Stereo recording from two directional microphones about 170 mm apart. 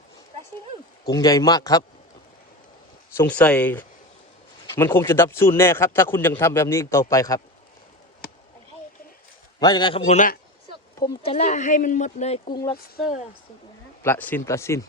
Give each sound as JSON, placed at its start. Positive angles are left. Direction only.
{"t": 1.0, "sound": "speech", "side_deg": 20}
{"t": 3.2, "sound": "a man's voice", "side_deg": 10}
{"t": 9.6, "sound": "speech", "side_deg": 25}
{"t": 10.1, "sound": "speech", "side_deg": 45}
{"t": 11.2, "sound": "speech", "side_deg": 35}
{"t": 14.0, "sound": "a man's voice", "side_deg": 10}